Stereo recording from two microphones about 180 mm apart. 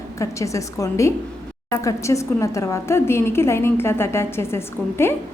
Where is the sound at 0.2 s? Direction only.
15° left (ahead or behind).